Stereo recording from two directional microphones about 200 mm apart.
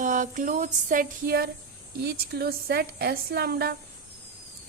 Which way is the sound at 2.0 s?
50° right (ahead or behind).